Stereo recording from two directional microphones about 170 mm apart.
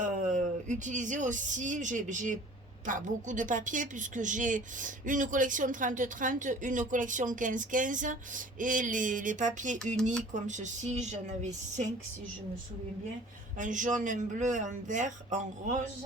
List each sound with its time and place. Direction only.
0.0 s a woman's voice: 50° right (ahead or behind)
13.6 s a woman's voice: 50° right (ahead or behind)